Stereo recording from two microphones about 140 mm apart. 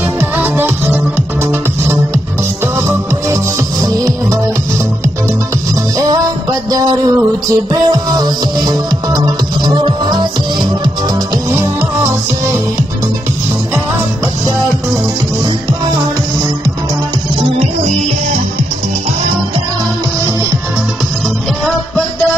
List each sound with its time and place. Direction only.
0.2 s music: 15° right (ahead or behind)
3.8 s music: 25° right (ahead or behind)
7.7 s music: 30° right (ahead or behind)